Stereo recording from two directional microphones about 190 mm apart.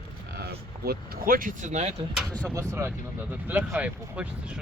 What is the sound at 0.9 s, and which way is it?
Speech, 50° right (ahead or behind).